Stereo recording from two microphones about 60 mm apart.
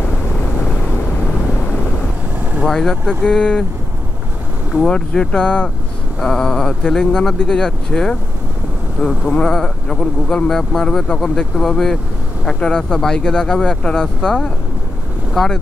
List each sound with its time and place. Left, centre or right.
2.7 s speech: centre
4.8 s speech: centre
9.3 s speech: centre